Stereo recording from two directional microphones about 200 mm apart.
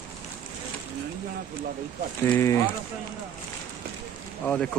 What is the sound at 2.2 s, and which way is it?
Speech, 10° left (ahead or behind).